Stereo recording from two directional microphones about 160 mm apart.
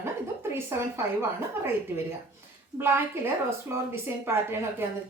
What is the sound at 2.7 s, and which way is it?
Speech, 15° right (ahead or behind).